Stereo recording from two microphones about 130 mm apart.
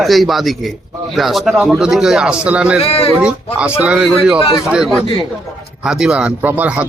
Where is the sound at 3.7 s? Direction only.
5° right (ahead or behind).